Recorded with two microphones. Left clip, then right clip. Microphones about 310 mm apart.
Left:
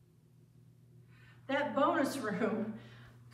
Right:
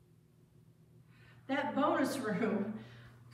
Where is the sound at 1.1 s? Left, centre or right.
Centre.